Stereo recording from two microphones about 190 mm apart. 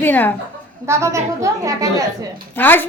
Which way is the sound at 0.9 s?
15° right (ahead or behind).